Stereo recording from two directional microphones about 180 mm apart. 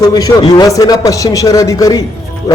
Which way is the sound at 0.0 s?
20° left (ahead or behind).